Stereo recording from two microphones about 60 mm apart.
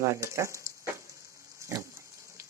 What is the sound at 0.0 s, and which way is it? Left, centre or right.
Speech, right.